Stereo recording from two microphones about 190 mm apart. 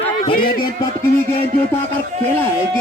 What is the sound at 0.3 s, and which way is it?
Speech, 50° left (ahead or behind).